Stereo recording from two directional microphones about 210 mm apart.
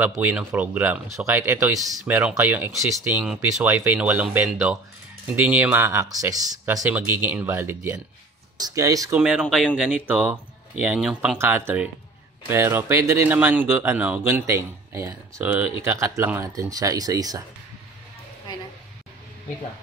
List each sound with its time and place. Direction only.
0.0 s speech: 5° right (ahead or behind)
9.2 s speech: 5° right (ahead or behind)